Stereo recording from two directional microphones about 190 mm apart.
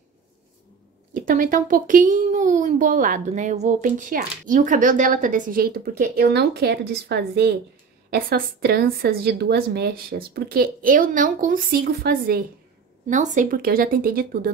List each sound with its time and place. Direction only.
1.1 s a child's voice: 45° right (ahead or behind)
13.1 s a child's voice: 40° right (ahead or behind)